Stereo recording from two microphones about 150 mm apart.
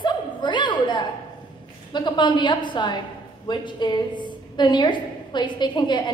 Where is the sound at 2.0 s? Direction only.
30° left (ahead or behind).